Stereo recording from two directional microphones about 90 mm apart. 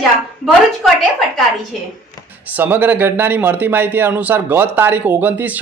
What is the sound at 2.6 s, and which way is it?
A man's voice, 20° right (ahead or behind).